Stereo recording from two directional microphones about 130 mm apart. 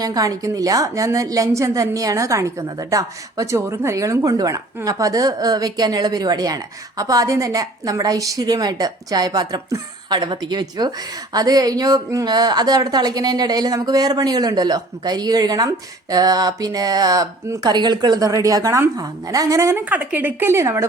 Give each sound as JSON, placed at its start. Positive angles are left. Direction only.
{"t": 0.0, "sound": "a woman's voice", "side_deg": -30}
{"t": 19.8, "sound": "speech", "side_deg": -10}